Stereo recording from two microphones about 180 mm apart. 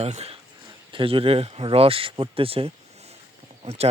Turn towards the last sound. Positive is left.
turn(degrees=-35)  # may be behind; listen again after turning